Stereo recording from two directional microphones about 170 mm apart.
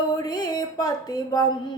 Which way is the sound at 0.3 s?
25° left (ahead or behind).